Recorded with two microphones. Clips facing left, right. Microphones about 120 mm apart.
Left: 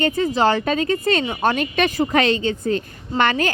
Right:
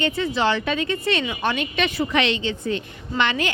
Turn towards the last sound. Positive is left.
turn(degrees=45)  # may be behind; listen again after turning